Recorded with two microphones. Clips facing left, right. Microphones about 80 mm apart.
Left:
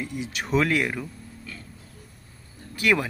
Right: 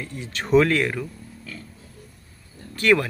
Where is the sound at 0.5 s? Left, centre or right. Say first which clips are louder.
Right 6 dB; centre.